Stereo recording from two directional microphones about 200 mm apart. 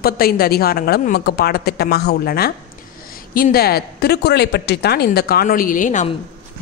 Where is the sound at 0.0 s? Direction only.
50° left (ahead or behind).